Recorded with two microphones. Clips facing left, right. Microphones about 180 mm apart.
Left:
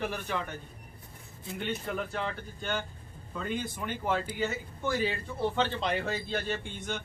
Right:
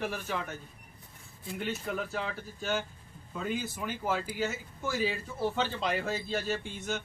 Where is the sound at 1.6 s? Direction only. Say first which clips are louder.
Left 1 dB; centre (ahead or behind).